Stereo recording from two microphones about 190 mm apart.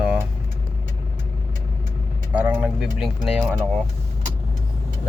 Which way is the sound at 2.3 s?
10° right (ahead or behind).